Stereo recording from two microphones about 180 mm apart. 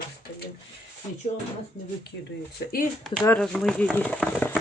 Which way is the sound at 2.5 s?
50° left (ahead or behind).